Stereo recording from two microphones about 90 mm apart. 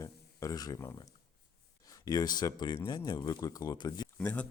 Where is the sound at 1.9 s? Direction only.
40° left (ahead or behind).